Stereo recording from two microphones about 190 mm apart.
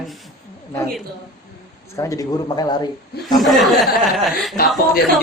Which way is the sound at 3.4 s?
Centre (ahead or behind).